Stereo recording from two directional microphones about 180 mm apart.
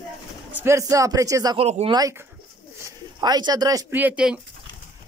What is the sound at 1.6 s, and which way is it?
Speech, 35° right (ahead or behind).